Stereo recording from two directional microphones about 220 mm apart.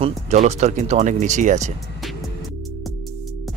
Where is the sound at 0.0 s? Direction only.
30° right (ahead or behind).